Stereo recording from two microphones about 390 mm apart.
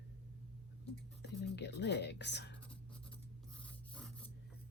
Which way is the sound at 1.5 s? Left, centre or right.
Left.